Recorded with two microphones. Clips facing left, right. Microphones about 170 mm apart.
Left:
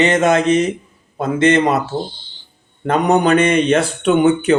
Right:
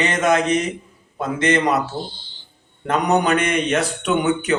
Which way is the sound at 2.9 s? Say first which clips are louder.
Left 4 dB; 30° left (ahead or behind).